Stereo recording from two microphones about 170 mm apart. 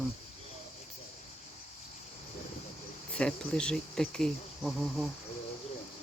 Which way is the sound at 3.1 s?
5° left (ahead or behind).